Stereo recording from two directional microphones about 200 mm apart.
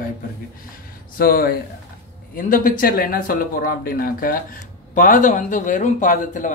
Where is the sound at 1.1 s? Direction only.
45° left (ahead or behind).